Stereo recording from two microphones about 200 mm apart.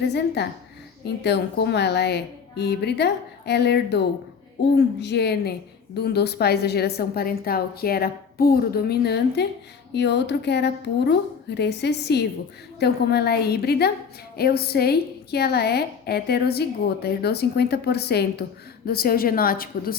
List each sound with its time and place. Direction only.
0.1 s a woman's voice: 60° left (ahead or behind)